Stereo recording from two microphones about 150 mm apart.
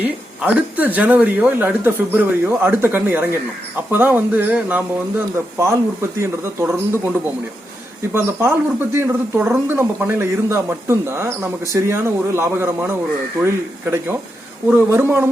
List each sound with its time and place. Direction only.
0.0 s speech: 10° right (ahead or behind)